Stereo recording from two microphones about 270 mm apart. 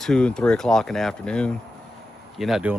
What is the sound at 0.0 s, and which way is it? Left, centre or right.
Speech, centre.